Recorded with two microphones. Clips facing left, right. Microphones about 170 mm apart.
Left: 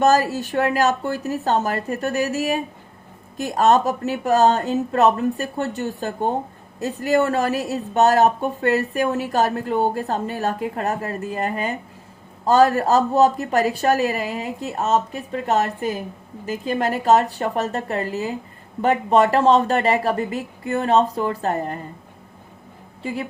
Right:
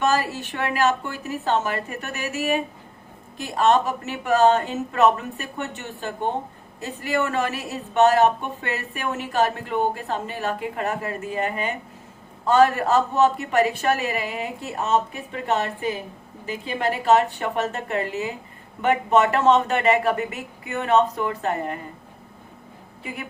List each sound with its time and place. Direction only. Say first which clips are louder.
0.0 s speech: left 5 dB; 40° left (ahead or behind)